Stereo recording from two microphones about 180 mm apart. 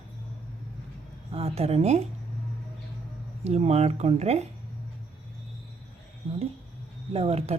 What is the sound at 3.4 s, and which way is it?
Speech, 35° right (ahead or behind).